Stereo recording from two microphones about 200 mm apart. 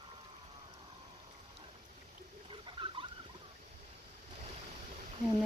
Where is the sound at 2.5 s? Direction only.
25° right (ahead or behind).